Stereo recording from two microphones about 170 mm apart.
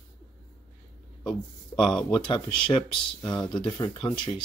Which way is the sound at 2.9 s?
5° left (ahead or behind).